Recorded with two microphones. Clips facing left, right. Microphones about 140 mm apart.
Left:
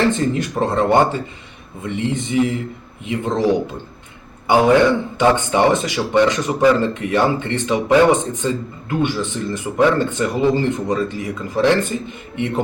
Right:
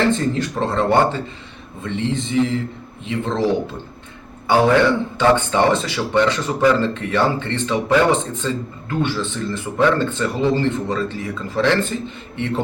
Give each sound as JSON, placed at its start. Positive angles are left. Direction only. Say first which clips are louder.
{"t": 0.1, "sound": "speech", "louder": "even", "side_deg": 15}
{"t": 4.4, "sound": "speech", "louder": "left 2 dB", "side_deg": 15}